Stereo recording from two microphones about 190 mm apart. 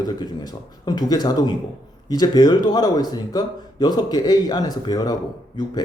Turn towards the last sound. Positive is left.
turn(degrees=20)  # may be behind; listen again after turning